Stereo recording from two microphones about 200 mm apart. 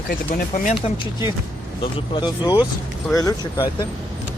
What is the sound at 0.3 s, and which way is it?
Speech, 40° left (ahead or behind).